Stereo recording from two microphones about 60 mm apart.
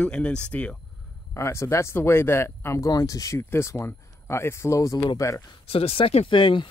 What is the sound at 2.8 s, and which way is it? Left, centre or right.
Speech, left.